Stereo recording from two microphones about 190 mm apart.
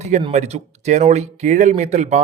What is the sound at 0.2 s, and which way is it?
A man's voice, 30° right (ahead or behind).